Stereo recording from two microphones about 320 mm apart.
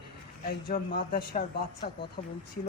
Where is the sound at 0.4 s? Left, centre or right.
Left.